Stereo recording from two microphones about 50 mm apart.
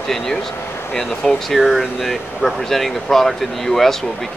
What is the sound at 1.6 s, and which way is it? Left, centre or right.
Speech, centre.